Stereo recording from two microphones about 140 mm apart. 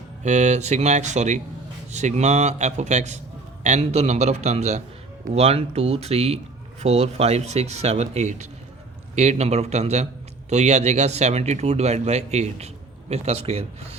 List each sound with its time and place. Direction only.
0.2 s a man's voice: 55° right (ahead or behind)